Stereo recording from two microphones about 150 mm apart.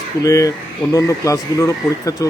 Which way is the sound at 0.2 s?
20° left (ahead or behind).